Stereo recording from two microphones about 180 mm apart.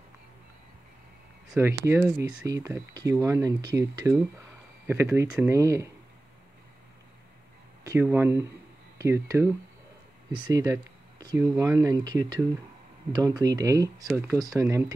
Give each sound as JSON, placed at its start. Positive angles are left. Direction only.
{"t": 1.6, "sound": "speech", "side_deg": -15}
{"t": 5.3, "sound": "speech", "side_deg": -15}
{"t": 7.8, "sound": "speech", "side_deg": -15}